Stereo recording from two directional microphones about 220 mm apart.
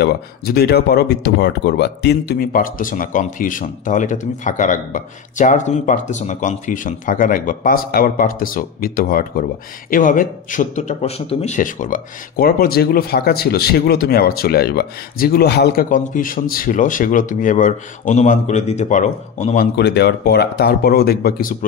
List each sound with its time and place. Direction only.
0.0 s speech: 45° left (ahead or behind)